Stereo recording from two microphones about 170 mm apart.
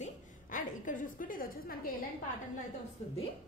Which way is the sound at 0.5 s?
50° left (ahead or behind).